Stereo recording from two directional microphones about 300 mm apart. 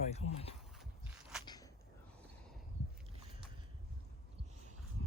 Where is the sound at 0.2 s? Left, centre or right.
Left.